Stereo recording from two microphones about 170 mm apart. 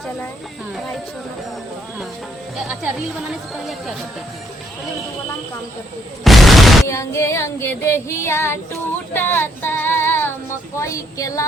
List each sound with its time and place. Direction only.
2.6 s speech: 5° right (ahead or behind)
6.2 s speech: centre (ahead or behind)
6.8 s female singing: 15° left (ahead or behind)
9.1 s child singing: 10° left (ahead or behind)
10.8 s female singing: 20° left (ahead or behind)